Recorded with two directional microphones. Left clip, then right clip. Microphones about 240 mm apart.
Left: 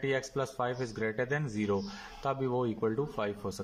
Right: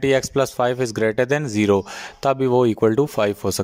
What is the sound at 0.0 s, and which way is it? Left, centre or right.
Speech, right.